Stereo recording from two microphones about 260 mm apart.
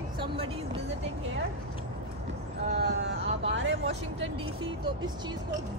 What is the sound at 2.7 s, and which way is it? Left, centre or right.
Speech, right.